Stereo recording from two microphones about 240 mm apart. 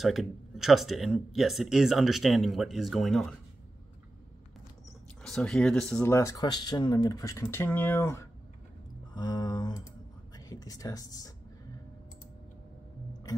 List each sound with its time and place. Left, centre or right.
0.0 s speech: centre
5.2 s speech: centre